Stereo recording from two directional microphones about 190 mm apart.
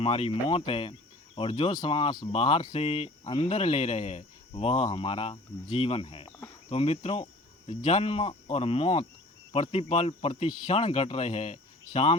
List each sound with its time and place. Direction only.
0.0 s speech: 30° left (ahead or behind)